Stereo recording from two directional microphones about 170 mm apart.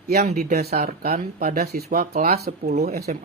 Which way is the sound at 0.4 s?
65° right (ahead or behind).